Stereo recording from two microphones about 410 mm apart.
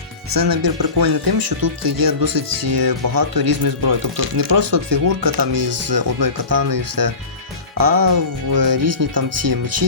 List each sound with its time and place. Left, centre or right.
0.3 s speech: right